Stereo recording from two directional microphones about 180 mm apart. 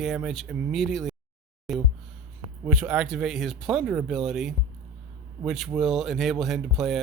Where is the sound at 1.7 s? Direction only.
Centre (ahead or behind).